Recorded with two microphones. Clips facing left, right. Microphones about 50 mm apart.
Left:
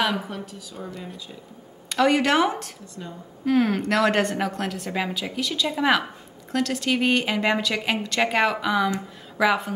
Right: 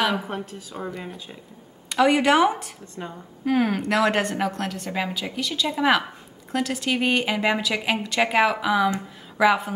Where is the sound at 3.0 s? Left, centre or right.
Right.